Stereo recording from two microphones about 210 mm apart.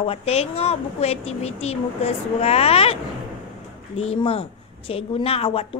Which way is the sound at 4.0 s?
25° left (ahead or behind).